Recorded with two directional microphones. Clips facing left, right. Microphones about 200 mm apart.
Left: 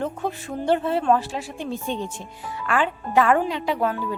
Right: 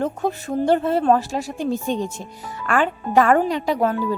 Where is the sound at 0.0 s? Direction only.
40° right (ahead or behind).